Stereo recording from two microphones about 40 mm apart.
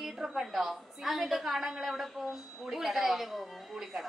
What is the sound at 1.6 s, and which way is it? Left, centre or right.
Speech, centre.